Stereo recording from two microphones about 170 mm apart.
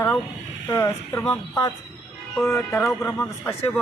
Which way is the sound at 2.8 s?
Centre (ahead or behind).